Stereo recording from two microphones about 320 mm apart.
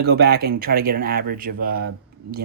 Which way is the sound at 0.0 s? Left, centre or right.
Right.